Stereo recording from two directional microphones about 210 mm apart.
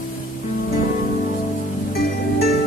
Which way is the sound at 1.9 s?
45° left (ahead or behind).